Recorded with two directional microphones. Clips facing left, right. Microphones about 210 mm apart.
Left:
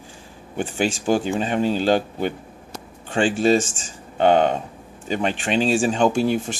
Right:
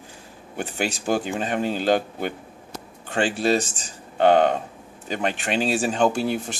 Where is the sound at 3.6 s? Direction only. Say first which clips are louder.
Left 2 dB; 40° right (ahead or behind).